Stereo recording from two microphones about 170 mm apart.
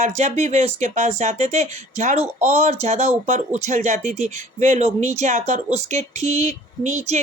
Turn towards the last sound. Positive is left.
turn(degrees=-45)  # may be behind; listen again after turning